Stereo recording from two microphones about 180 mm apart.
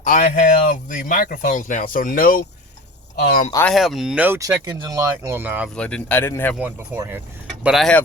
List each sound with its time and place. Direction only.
0.0 s speech: 45° left (ahead or behind)
3.7 s speech: centre (ahead or behind)
5.7 s speech: 5° left (ahead or behind)
6.6 s speech: 10° right (ahead or behind)